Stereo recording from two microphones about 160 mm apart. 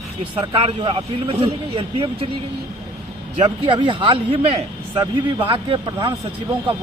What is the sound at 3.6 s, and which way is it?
Speech, 30° right (ahead or behind).